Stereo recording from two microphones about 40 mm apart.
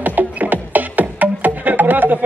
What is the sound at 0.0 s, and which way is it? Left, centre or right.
Music, right.